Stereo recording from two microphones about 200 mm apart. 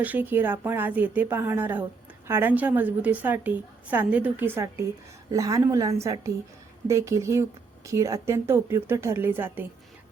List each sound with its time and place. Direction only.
0.0 s a woman's voice: 10° right (ahead or behind)